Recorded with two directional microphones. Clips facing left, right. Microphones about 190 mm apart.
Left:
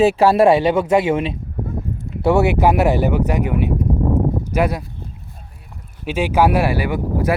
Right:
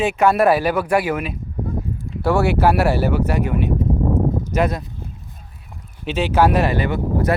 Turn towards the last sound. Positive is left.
turn(degrees=10)  # may be behind; listen again after turning